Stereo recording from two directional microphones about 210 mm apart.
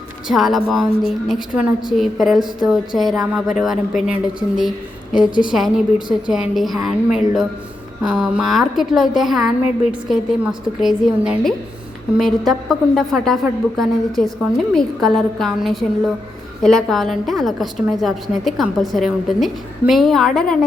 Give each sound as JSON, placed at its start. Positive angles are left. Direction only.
{"t": 0.3, "sound": "a woman's voice", "side_deg": 0}